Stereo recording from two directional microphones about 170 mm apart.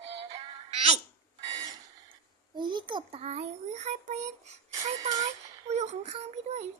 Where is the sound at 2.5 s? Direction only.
25° right (ahead or behind); by 4.5 s 45° right (ahead or behind).